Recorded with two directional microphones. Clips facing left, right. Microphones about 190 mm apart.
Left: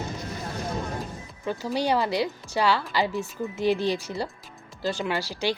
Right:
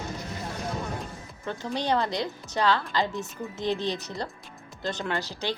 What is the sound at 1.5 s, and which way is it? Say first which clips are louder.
A woman's voice: left 3 dB; 10° left (ahead or behind).